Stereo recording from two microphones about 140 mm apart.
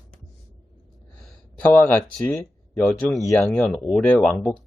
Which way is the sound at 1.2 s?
10° left (ahead or behind).